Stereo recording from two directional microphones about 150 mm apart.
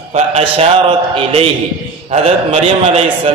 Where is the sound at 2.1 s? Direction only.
45° right (ahead or behind).